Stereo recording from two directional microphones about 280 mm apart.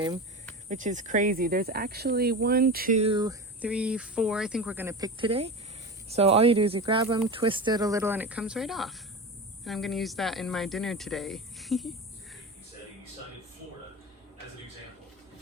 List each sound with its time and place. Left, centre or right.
0.7 s speech: right; by 11.9 s centre